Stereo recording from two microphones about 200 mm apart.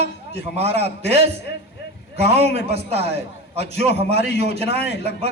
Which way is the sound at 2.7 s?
30° right (ahead or behind).